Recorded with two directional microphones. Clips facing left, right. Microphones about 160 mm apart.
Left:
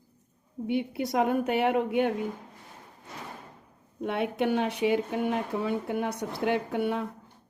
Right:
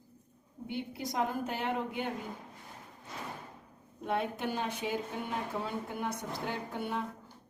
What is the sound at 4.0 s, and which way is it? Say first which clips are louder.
A woman's voice: left 6 dB; 70° left (ahead or behind).